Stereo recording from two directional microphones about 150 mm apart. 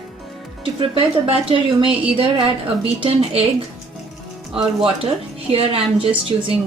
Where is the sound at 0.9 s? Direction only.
35° right (ahead or behind).